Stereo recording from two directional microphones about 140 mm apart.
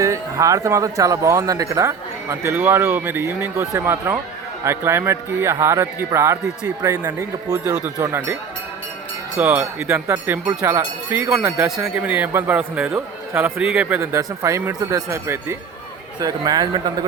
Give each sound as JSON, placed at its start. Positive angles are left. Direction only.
{"t": 0.0, "sound": "speech", "side_deg": -20}
{"t": 9.4, "sound": "speech", "side_deg": -10}
{"t": 14.0, "sound": "speech", "side_deg": -20}